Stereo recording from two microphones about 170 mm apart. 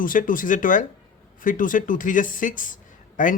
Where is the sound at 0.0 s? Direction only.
55° left (ahead or behind).